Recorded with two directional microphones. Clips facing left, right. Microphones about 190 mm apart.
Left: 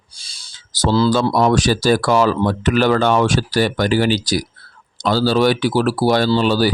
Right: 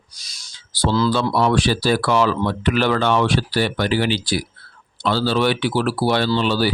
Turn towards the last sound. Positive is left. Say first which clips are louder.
# left 3 dB
turn(degrees=40)  # may be behind; listen again after turning